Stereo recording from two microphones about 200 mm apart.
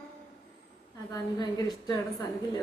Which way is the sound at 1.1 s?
20° left (ahead or behind).